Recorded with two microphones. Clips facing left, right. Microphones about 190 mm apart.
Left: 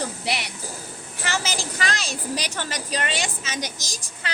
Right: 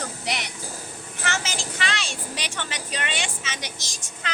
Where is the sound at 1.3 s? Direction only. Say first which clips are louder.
Left 5 dB; 35° left (ahead or behind).